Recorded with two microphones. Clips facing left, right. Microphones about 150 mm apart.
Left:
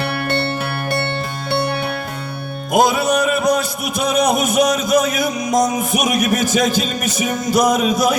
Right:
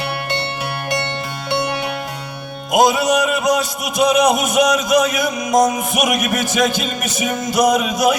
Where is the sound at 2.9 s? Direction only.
50° left (ahead or behind).